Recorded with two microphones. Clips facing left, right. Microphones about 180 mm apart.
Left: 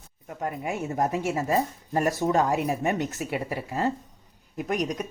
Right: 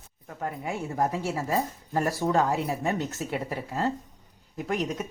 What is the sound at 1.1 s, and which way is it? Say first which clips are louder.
Speech: left 3 dB; 15° left (ahead or behind).